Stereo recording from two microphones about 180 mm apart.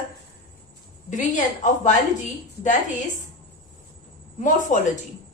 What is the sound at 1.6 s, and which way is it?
Speech, 45° left (ahead or behind).